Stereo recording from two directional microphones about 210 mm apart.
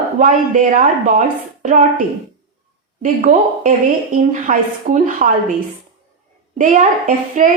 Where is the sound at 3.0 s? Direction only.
40° right (ahead or behind).